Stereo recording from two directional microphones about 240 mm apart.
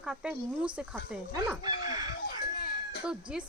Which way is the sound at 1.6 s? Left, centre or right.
Centre.